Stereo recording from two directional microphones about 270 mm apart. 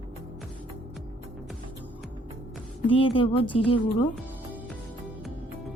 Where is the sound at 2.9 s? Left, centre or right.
Centre.